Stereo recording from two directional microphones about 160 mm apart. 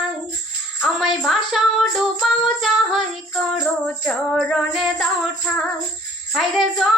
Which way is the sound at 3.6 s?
Centre (ahead or behind).